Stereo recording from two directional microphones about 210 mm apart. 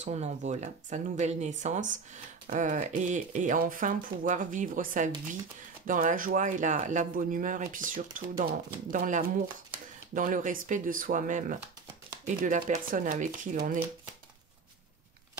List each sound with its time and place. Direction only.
0.0 s speech: 30° right (ahead or behind)